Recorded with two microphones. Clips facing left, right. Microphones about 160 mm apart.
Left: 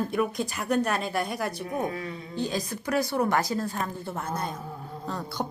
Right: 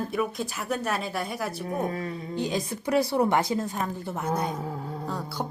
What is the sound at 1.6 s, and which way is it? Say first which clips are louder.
Speech: right 1 dB; 35° right (ahead or behind).